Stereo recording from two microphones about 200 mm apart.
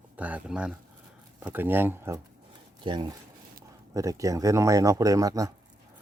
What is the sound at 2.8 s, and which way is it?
Speech, 25° right (ahead or behind).